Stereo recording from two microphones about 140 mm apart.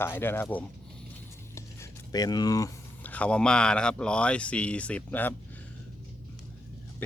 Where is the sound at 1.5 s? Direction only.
25° left (ahead or behind).